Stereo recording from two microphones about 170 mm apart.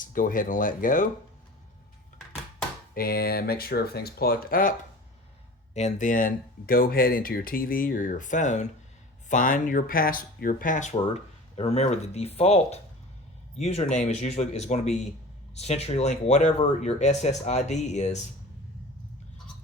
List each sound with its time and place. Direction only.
0.0 s speech: 50° left (ahead or behind)
2.9 s speech: 60° left (ahead or behind)
5.7 s speech: 45° left (ahead or behind)
10.9 s speech: 35° left (ahead or behind)